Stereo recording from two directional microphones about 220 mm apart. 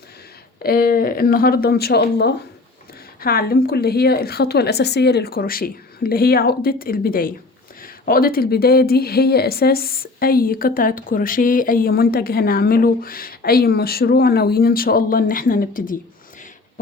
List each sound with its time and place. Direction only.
0.6 s speech: 40° left (ahead or behind)